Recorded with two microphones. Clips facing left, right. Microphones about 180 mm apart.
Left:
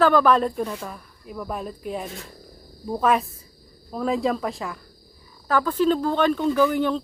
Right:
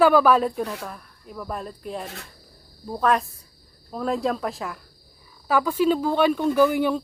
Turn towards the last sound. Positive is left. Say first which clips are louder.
# right 1 dB
turn(degrees=-10)  # may be behind; listen again after turning